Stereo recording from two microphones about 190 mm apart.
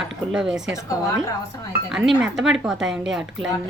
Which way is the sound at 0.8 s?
15° left (ahead or behind).